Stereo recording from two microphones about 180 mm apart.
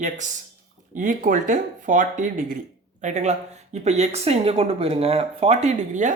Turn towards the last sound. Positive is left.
turn(degrees=-40)  # may be behind; listen again after turning